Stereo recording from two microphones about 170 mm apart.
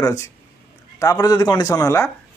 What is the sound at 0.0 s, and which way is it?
Speech, 15° left (ahead or behind).